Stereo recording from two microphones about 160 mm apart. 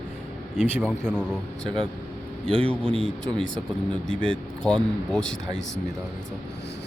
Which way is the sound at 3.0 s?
5° left (ahead or behind).